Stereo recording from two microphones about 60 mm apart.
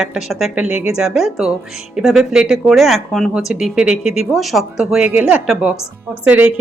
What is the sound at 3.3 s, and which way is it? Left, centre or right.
Speech, centre.